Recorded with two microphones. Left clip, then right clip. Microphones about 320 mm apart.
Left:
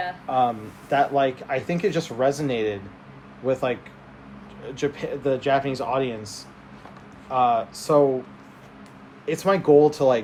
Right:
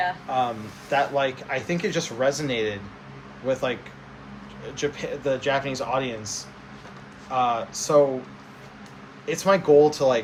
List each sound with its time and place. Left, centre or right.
0.9 s speech: left
9.2 s speech: left